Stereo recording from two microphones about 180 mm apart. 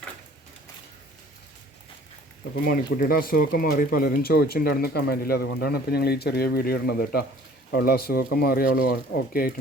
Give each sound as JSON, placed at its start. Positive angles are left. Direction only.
{"t": 2.6, "sound": "speech", "side_deg": 55}